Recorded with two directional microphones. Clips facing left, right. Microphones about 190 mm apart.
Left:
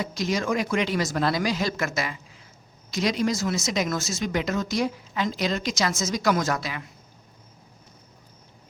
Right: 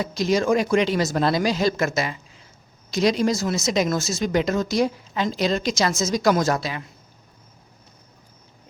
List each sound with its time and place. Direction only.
0.0 s a man's voice: 30° right (ahead or behind)